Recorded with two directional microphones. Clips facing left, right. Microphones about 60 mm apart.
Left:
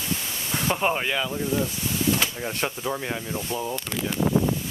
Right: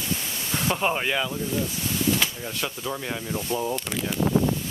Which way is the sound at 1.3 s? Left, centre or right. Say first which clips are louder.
Left 2 dB; left.